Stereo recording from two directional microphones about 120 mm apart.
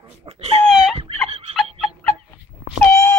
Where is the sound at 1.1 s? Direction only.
60° right (ahead or behind).